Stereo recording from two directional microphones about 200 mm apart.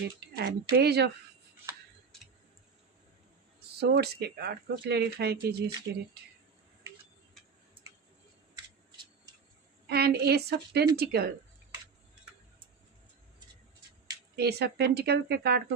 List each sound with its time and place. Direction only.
0.3 s speech: 55° right (ahead or behind)
3.8 s speech: 55° right (ahead or behind)
9.9 s speech: 50° right (ahead or behind)
14.3 s speech: 55° right (ahead or behind)